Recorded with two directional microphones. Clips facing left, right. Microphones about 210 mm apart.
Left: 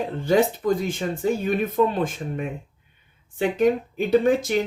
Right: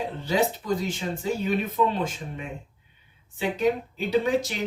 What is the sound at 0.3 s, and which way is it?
Speech, 50° left (ahead or behind).